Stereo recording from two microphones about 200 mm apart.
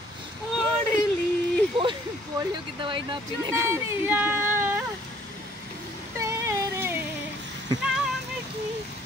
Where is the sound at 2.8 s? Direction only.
25° right (ahead or behind).